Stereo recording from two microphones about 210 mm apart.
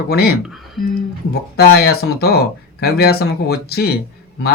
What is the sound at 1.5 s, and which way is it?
Speech, 50° left (ahead or behind).